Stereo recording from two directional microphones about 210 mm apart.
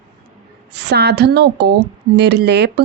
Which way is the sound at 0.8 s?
50° right (ahead or behind).